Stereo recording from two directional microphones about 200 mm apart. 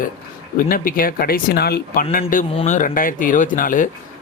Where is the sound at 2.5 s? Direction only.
35° left (ahead or behind).